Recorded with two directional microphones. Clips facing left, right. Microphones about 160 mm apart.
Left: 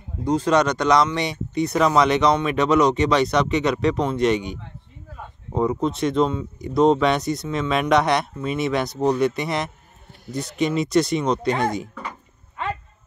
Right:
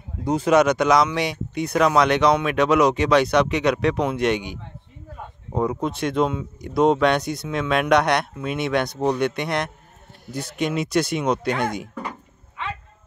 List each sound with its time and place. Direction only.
0.2 s speech: 10° right (ahead or behind)
12.6 s music: 45° left (ahead or behind)